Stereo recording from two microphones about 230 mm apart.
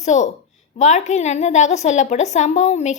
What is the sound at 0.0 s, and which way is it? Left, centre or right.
A woman's voice, left.